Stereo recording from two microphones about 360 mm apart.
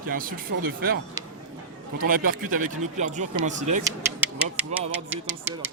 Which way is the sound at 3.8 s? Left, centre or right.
Centre.